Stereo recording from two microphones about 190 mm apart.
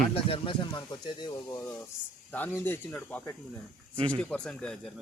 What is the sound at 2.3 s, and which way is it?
Speech, 10° left (ahead or behind).